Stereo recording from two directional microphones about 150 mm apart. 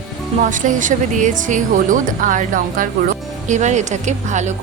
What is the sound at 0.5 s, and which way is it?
Speech, 60° right (ahead or behind).